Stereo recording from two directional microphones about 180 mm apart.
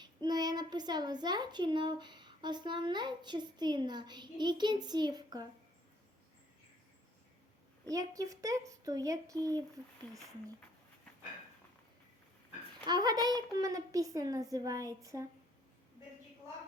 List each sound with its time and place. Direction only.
0.0 s a woman's voice: 25° right (ahead or behind)
7.9 s a woman's voice: 20° right (ahead or behind)
12.8 s a woman's voice: 25° right (ahead or behind)